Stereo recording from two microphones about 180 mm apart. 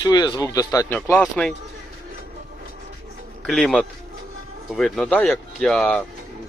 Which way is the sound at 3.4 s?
Centre (ahead or behind).